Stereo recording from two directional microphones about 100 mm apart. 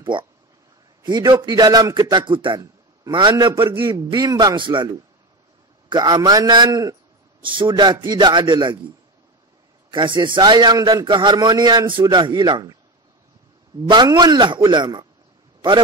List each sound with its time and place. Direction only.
0.0 s a man's voice: 40° right (ahead or behind)
3.9 s a man's voice: 45° right (ahead or behind)
4.6 s a man's voice: 55° right (ahead or behind)
5.9 s a man's voice: 45° right (ahead or behind)
7.4 s a man's voice: 55° right (ahead or behind)
9.8 s a man's voice: 55° right (ahead or behind)
13.8 s a man's voice: 45° right (ahead or behind)